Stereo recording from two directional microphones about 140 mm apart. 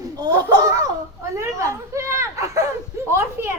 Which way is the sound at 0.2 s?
30° right (ahead or behind).